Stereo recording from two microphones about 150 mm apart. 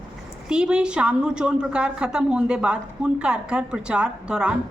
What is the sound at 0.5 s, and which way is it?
A woman's voice, 5° right (ahead or behind).